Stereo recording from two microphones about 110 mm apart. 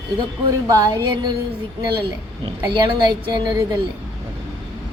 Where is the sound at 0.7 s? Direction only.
35° right (ahead or behind).